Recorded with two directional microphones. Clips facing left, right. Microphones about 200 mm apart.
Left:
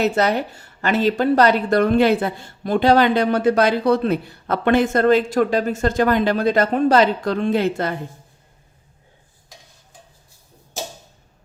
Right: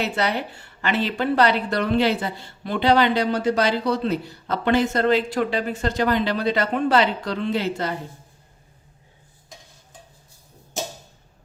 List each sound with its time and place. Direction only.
0.0 s a woman's voice: 45° left (ahead or behind)